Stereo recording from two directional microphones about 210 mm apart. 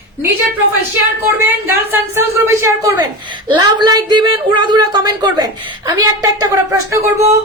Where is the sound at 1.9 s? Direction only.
10° right (ahead or behind).